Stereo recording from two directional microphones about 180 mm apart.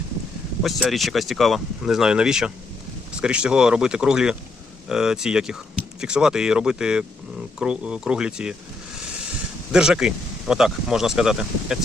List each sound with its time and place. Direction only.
0.6 s speech: centre (ahead or behind)
9.7 s speech: 5° right (ahead or behind)